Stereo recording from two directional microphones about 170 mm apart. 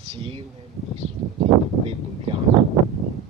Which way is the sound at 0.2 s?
30° right (ahead or behind).